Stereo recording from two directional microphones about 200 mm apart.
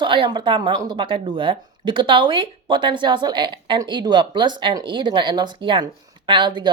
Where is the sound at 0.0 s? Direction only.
25° right (ahead or behind).